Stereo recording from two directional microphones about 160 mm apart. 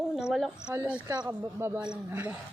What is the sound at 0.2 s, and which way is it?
A woman's voice, 5° right (ahead or behind).